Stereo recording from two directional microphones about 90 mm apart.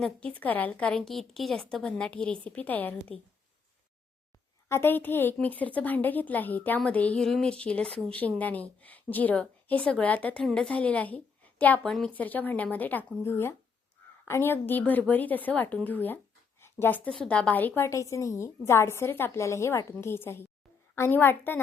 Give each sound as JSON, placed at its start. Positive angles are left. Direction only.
{"t": 0.2, "sound": "a woman's voice", "side_deg": 15}
{"t": 4.7, "sound": "a woman's voice", "side_deg": 25}
{"t": 11.8, "sound": "a woman's voice", "side_deg": 5}
{"t": 12.1, "sound": "a woman's voice", "side_deg": 20}
{"t": 17.8, "sound": "a woman's voice", "side_deg": 35}